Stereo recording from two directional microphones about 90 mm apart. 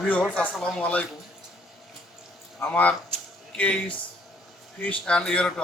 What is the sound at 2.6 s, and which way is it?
A man's voice, 20° left (ahead or behind).